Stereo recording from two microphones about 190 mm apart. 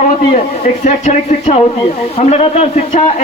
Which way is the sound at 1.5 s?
35° left (ahead or behind).